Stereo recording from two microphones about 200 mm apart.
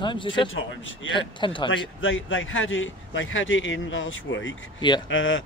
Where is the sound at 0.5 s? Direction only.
75° left (ahead or behind).